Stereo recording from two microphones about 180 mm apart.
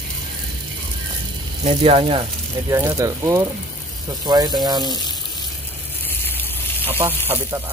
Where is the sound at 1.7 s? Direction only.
35° right (ahead or behind).